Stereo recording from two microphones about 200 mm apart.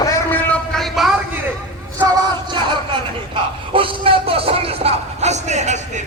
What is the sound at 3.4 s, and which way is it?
A man's voice, 25° right (ahead or behind).